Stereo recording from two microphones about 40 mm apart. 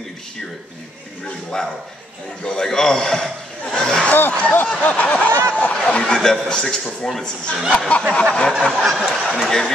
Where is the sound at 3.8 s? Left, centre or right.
Centre.